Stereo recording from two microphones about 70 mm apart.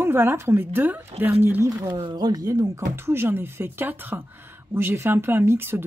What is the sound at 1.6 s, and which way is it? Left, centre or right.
Speech, right.